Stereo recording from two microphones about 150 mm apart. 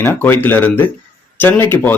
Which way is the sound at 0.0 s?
15° left (ahead or behind).